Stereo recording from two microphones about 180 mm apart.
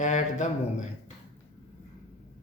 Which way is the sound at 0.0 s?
40° left (ahead or behind).